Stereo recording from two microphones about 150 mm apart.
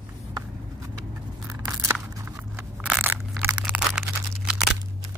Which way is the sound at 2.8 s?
10° right (ahead or behind).